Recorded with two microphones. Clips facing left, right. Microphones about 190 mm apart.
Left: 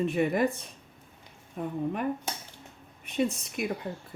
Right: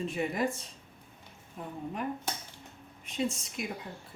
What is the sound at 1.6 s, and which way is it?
Speech, 60° left (ahead or behind).